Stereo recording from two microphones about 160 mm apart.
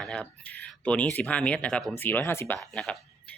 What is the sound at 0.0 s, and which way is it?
A man's voice, 5° left (ahead or behind).